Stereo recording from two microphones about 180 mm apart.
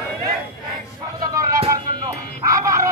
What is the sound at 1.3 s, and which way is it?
Music, 20° right (ahead or behind).